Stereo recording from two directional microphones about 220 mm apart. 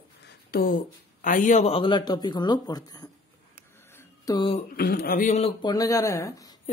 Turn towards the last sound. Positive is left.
turn(degrees=15)  # may be behind; listen again after turning